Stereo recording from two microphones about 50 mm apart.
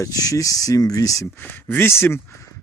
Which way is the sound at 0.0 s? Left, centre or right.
Left.